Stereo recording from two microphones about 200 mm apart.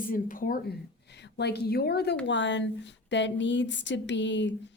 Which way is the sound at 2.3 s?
65° left (ahead or behind).